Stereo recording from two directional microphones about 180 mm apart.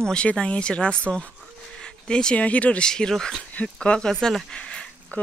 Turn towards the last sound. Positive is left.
turn(degrees=5)  # may be behind; listen again after turning